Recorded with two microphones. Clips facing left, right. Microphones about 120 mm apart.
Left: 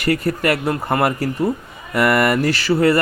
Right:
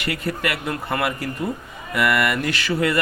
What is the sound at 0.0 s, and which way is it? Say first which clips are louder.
Speech: left 7 dB; 40° left (ahead or behind).